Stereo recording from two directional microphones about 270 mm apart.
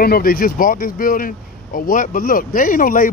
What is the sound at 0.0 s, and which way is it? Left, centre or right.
Speech, left.